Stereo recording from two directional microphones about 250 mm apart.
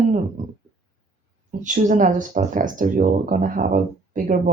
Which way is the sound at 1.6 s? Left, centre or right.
Right.